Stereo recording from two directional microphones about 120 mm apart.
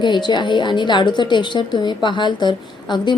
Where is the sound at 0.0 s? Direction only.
40° left (ahead or behind).